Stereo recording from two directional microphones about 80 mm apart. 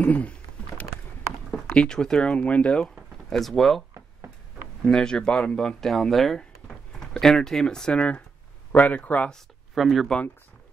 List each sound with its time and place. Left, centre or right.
0.0 s rowboat: centre
1.5 s speech: centre
4.8 s speech: centre
9.8 s speech: centre